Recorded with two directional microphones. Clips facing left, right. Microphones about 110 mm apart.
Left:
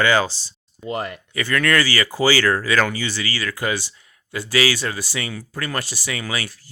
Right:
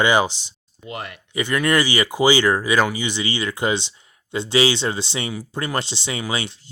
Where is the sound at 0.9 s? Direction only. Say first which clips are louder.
Left 6 dB; 40° left (ahead or behind).